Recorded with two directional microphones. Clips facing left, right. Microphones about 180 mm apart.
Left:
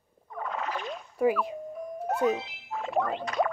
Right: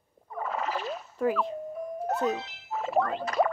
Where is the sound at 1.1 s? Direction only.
10° left (ahead or behind).